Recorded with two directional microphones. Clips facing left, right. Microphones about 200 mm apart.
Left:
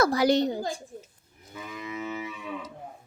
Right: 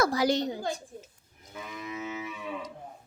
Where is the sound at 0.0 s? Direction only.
65° left (ahead or behind).